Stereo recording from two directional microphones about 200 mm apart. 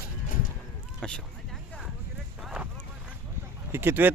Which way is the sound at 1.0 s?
5° left (ahead or behind).